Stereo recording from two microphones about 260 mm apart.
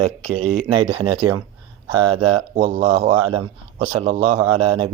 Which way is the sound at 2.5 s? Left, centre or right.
Right.